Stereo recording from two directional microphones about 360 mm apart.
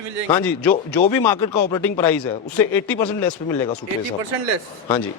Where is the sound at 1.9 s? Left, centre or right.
Centre.